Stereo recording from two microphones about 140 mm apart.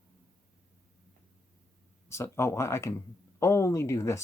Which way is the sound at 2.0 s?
20° left (ahead or behind).